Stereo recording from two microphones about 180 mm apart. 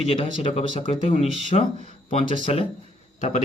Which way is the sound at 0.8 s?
40° left (ahead or behind).